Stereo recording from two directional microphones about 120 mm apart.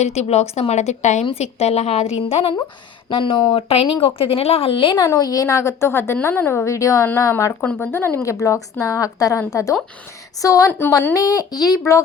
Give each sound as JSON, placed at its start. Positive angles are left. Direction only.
{"t": 0.0, "sound": "a woman's voice", "side_deg": 65}
{"t": 3.4, "sound": "speech", "side_deg": 60}
{"t": 5.0, "sound": "a woman's voice", "side_deg": 30}
{"t": 7.6, "sound": "a woman's voice", "side_deg": 15}
{"t": 11.1, "sound": "a woman's voice", "side_deg": 30}